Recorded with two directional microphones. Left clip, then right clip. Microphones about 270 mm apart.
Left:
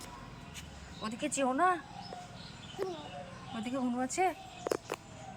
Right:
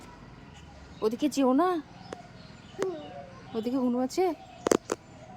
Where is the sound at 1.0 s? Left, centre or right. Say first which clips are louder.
Right 7 dB; centre.